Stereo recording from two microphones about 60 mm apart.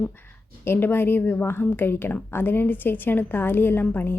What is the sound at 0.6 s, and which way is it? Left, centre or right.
Speech, left.